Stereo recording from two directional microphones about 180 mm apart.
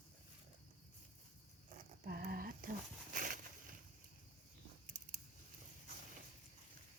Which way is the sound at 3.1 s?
50° right (ahead or behind).